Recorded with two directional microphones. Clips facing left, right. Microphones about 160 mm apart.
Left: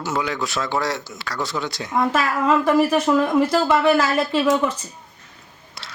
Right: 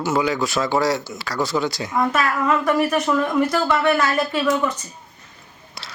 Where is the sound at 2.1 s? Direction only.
30° left (ahead or behind).